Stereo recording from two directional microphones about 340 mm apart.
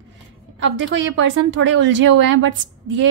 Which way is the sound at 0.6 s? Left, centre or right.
Right.